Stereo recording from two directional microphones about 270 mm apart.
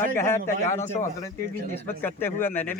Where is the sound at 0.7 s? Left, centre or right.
Left.